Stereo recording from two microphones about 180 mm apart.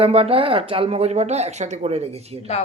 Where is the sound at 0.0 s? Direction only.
35° right (ahead or behind).